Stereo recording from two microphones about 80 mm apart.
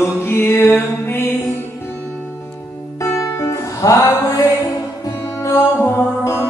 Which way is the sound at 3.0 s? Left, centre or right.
Left.